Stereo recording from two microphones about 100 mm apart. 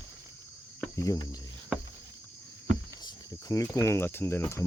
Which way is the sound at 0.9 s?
35° left (ahead or behind).